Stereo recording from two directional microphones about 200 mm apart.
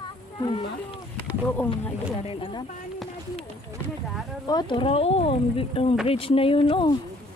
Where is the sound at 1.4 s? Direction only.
10° left (ahead or behind).